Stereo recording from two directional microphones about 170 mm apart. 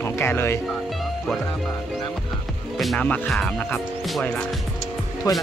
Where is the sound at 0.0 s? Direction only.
15° left (ahead or behind).